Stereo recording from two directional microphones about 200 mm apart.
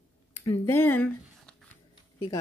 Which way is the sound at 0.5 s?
10° left (ahead or behind).